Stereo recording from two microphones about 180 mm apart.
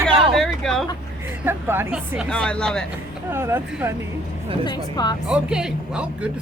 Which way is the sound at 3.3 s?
15° right (ahead or behind).